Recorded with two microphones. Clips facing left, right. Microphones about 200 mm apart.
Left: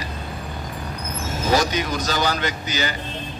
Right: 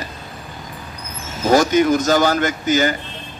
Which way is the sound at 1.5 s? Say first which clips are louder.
Right 8 dB; 50° right (ahead or behind).